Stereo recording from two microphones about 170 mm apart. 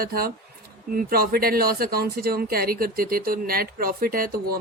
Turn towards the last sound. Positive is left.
turn(degrees=-60)  # may be behind; listen again after turning